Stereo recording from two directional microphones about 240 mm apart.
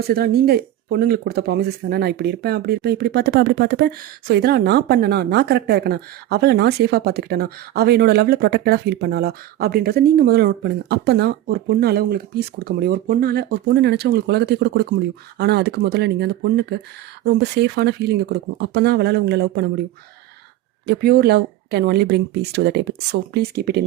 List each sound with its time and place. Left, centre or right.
0.1 s speech: right
20.8 s speech: right